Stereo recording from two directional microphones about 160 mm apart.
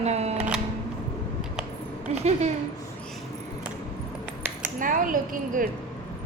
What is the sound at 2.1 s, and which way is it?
Speech, 40° right (ahead or behind).